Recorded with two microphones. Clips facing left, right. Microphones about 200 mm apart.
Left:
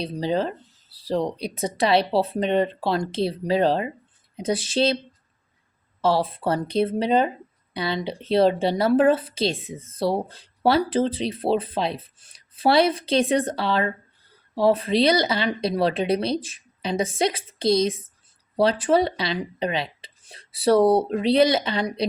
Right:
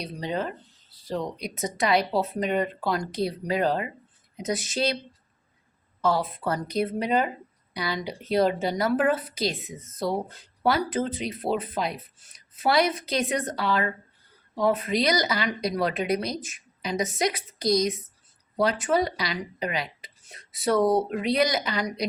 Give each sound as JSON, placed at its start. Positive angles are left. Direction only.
{"t": 0.0, "sound": "a woman's voice", "side_deg": 30}
{"t": 6.0, "sound": "a woman's voice", "side_deg": 30}